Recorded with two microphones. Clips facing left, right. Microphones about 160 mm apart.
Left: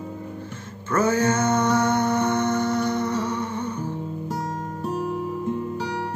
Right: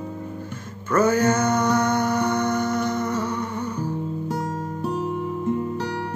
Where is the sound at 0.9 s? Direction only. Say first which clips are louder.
Right 2 dB; 25° left (ahead or behind).